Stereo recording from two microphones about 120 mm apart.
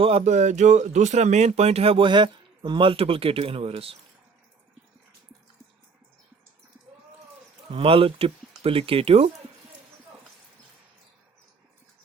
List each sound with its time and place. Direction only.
0.0 s speech: 60° right (ahead or behind)
7.7 s speech: 50° right (ahead or behind)